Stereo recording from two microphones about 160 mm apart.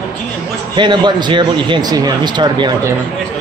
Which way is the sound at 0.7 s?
30° right (ahead or behind).